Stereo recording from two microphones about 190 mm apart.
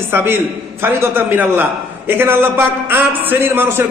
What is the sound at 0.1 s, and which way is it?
A man's voice, 10° right (ahead or behind).